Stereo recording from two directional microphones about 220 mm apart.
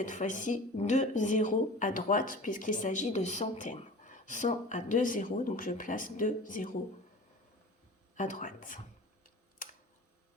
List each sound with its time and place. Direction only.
0.0 s speech: 35° left (ahead or behind)
8.1 s speech: 35° left (ahead or behind)